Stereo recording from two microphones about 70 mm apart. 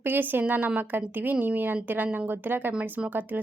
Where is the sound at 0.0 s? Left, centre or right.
Right.